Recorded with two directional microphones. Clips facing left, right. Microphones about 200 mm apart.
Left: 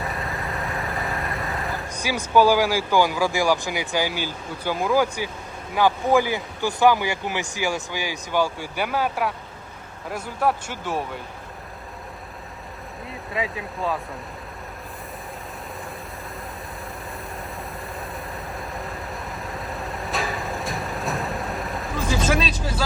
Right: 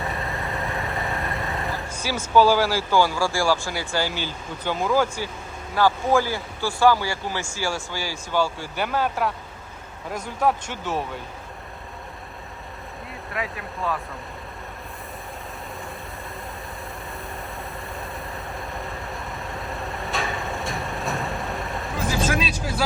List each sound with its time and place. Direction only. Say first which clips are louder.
0.0 s vehicle: even; centre (ahead or behind)
1.9 s a sound: left 1 dB; 15° left (ahead or behind)
2.3 s speech: even; 15° left (ahead or behind)
13.3 s speech: left 3 dB; 25° left (ahead or behind)
18.5 s vehicle: left 1 dB; centre (ahead or behind)